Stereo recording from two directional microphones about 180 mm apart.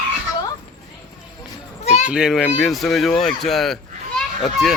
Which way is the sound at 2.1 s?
5° right (ahead or behind).